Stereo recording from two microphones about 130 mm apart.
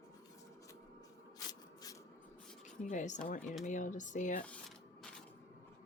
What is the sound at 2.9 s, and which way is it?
Speech, 70° left (ahead or behind).